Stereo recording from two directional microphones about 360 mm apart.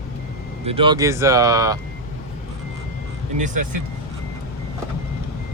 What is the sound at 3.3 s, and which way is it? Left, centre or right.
Speech, right.